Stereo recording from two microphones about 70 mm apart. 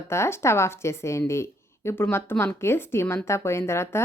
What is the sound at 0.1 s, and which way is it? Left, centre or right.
A woman's voice, left.